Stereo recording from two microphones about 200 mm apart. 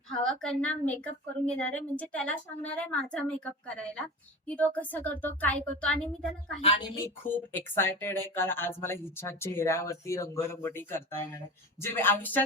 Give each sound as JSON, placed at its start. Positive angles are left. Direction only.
{"t": 0.2, "sound": "a woman's voice", "side_deg": 5}
{"t": 6.6, "sound": "a woman's voice", "side_deg": 30}
{"t": 6.9, "sound": "speech", "side_deg": 10}